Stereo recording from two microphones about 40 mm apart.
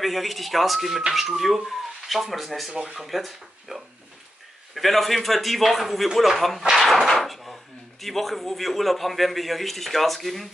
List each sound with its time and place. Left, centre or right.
0.0 s a man's voice: centre
2.7 s speech: right
3.0 s a man's voice: centre
6.9 s whip: centre
8.0 s a man's voice: centre